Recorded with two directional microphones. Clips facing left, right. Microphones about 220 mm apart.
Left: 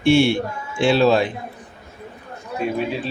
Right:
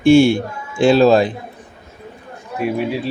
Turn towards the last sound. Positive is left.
turn(degrees=-10)  # may be behind; listen again after turning